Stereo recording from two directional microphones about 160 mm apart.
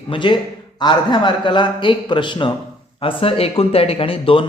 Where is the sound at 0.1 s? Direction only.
30° left (ahead or behind).